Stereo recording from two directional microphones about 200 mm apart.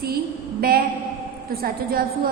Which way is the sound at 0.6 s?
50° right (ahead or behind).